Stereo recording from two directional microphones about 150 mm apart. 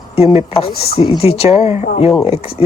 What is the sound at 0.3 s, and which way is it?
Speech, 40° left (ahead or behind).